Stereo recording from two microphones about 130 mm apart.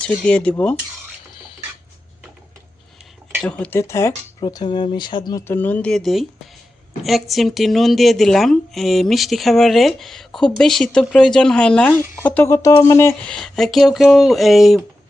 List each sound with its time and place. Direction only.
0.3 s speech: 10° left (ahead or behind)
3.4 s speech: 10° left (ahead or behind)
4.4 s speech: 35° left (ahead or behind)
5.5 s a woman's voice: 15° left (ahead or behind)
13.2 s a woman's voice: 5° left (ahead or behind)